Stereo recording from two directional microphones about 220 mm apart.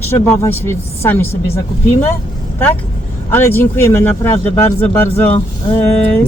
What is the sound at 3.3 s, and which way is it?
Speech, 10° left (ahead or behind).